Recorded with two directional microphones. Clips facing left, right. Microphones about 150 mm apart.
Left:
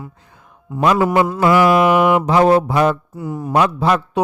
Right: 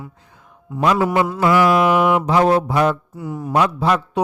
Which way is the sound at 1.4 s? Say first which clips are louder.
Left 2 dB; 65° left (ahead or behind).